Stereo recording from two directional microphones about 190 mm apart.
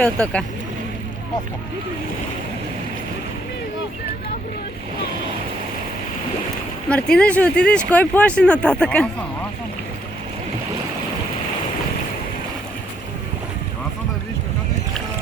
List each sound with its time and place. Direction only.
0.0 s speech: 5° left (ahead or behind)
6.9 s speech: 5° left (ahead or behind)